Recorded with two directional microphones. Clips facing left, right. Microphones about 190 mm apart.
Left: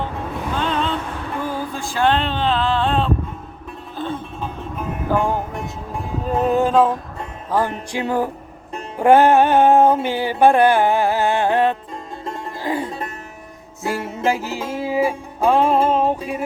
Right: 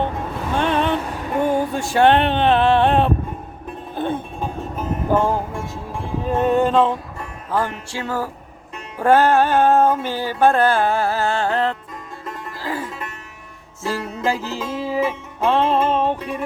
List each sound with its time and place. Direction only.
0.6 s vehicle: 60° right (ahead or behind)
0.9 s music: 10° right (ahead or behind)
1.4 s music: 25° right (ahead or behind)
1.9 s a sound: 65° right (ahead or behind)
3.7 s music: 55° right (ahead or behind)
6.2 s a sound: centre (ahead or behind)
7.2 s music: 15° left (ahead or behind)
7.9 s speech: 20° left (ahead or behind)
9.0 s music: 15° left (ahead or behind)
14.3 s music: 10° left (ahead or behind)